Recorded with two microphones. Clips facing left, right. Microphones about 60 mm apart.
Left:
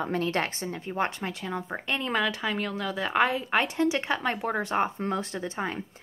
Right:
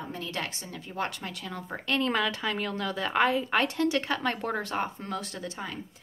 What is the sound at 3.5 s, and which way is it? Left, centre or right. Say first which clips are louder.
Speech: left 1 dB; centre.